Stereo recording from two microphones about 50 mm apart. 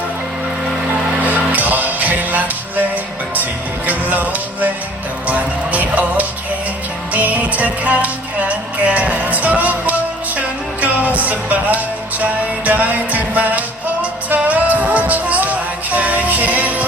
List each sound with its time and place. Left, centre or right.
1.2 s music: right
3.8 s music: right